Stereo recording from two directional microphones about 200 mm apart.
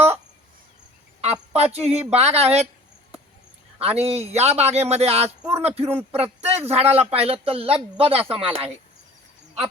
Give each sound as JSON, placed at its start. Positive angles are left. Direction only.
{"t": 1.2, "sound": "a man's voice", "side_deg": -30}
{"t": 3.8, "sound": "a man's voice", "side_deg": -30}